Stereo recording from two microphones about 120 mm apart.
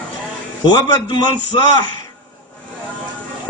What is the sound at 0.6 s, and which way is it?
Speech, 35° left (ahead or behind).